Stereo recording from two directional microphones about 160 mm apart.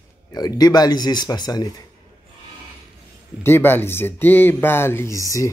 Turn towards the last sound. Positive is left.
turn(degrees=20)  # may be behind; listen again after turning